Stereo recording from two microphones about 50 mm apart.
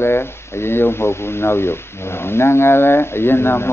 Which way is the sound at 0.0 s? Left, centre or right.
Left.